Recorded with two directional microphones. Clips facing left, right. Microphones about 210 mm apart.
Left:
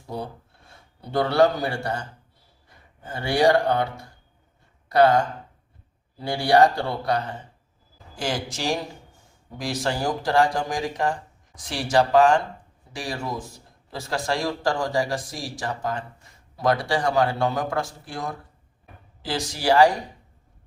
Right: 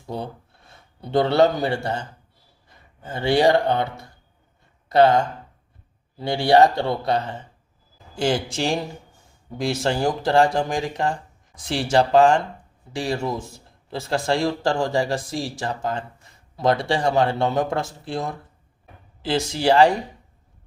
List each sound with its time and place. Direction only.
1.1 s speech: 20° right (ahead or behind)
4.9 s speech: 25° right (ahead or behind)